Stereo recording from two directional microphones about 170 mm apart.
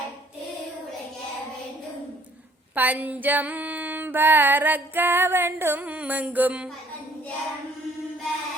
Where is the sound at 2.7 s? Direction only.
10° right (ahead or behind).